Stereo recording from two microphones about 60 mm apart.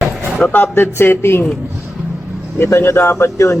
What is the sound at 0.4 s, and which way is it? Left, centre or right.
Speech, left.